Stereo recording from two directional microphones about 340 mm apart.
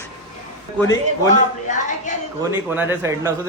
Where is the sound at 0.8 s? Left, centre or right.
Centre.